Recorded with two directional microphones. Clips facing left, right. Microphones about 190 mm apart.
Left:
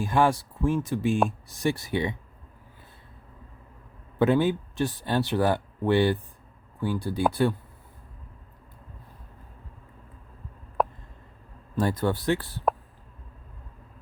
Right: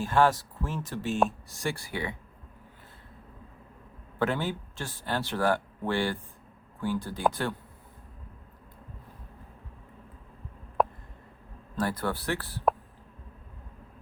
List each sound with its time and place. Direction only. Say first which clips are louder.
0.0 s speech: left 1 dB; 15° left (ahead or behind)
4.2 s speech: left 7 dB; 15° left (ahead or behind)
10.8 s a sound: even; centre (ahead or behind)
11.8 s speech: left 5 dB; 20° left (ahead or behind)